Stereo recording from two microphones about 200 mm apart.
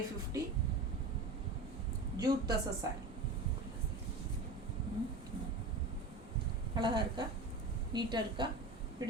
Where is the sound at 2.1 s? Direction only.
20° right (ahead or behind).